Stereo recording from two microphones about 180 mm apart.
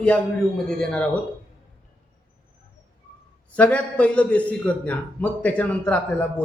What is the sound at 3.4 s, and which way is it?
A man's voice, 5° left (ahead or behind).